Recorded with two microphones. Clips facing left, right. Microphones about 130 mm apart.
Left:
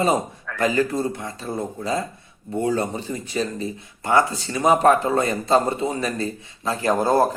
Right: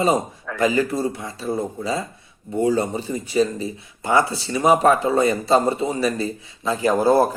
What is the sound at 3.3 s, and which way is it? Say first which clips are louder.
Mantra: right 6 dB; 5° right (ahead or behind).